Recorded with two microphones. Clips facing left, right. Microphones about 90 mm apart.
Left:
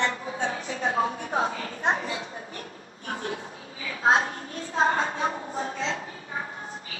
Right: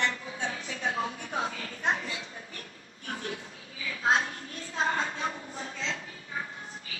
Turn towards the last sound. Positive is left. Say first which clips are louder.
# left 7 dB
turn(degrees=40)  # may be behind; listen again after turning